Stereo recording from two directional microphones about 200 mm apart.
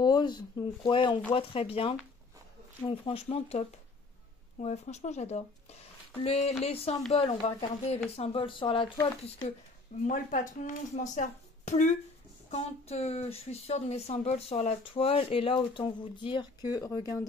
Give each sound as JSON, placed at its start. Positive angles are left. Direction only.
{"t": 0.0, "sound": "speech", "side_deg": 20}
{"t": 10.0, "sound": "speech", "side_deg": 40}